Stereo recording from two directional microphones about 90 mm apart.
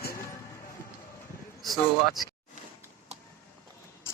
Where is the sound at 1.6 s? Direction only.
Centre (ahead or behind).